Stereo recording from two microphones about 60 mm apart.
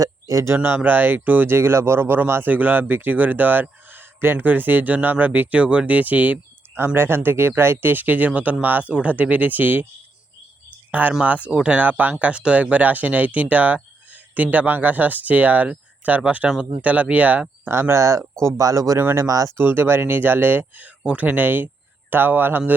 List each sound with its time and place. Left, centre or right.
0.0 s speech: right
0.5 s speech: right
1.5 s speech: right
6.7 s speech: right
11.2 s speech: right
17.7 s speech: right
19.5 s speech: right